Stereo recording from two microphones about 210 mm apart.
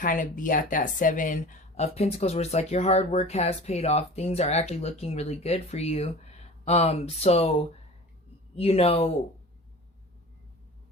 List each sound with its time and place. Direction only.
0.0 s speech: 40° left (ahead or behind)
8.5 s speech: 30° left (ahead or behind)